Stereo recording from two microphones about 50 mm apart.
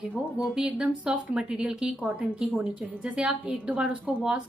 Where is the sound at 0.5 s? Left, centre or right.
Centre.